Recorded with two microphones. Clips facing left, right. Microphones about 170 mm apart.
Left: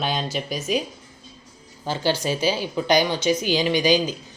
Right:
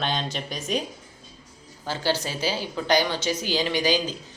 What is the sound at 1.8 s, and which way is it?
A woman's voice, 15° left (ahead or behind).